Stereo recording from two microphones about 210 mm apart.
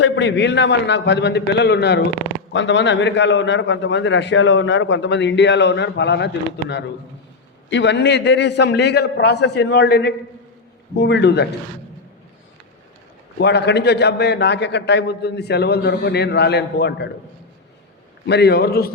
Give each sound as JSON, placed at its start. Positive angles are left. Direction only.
{"t": 0.0, "sound": "a man's voice", "side_deg": 55}
{"t": 13.4, "sound": "a man's voice", "side_deg": 55}
{"t": 18.3, "sound": "a man's voice", "side_deg": 50}